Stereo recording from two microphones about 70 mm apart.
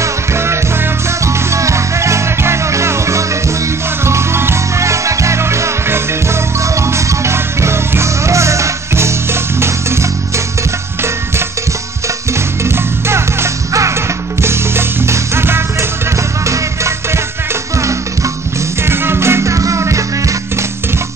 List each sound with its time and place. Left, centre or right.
0.0 s music: right
12.6 s music: right
18.9 s music: right